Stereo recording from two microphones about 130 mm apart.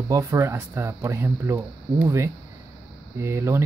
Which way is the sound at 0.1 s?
25° right (ahead or behind).